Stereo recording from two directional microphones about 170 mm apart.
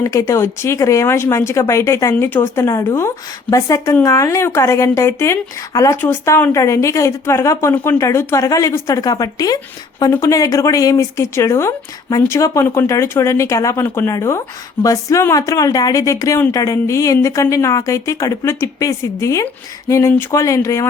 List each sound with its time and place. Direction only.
0.0 s speech: 20° left (ahead or behind)